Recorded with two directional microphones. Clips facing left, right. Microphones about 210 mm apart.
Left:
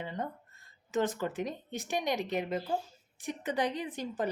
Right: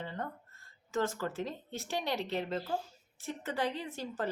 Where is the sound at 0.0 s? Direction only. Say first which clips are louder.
Left 2 dB; 15° left (ahead or behind).